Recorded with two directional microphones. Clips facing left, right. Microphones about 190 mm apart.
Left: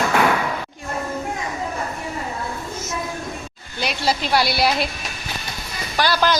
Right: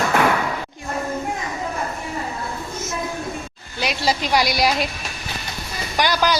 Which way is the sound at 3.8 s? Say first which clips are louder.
Even; 10° right (ahead or behind).